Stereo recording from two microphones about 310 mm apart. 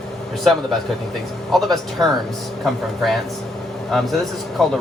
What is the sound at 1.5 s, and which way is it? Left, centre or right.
Speech, centre.